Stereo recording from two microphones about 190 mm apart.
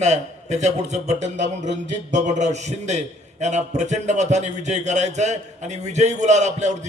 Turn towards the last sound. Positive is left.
turn(degrees=-40)  # may be behind; listen again after turning